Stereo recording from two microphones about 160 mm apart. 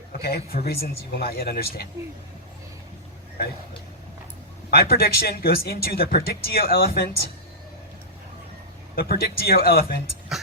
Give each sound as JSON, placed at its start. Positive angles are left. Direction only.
{"t": 0.2, "sound": "speech", "side_deg": 75}
{"t": 4.7, "sound": "speech", "side_deg": 75}
{"t": 9.0, "sound": "speech", "side_deg": 75}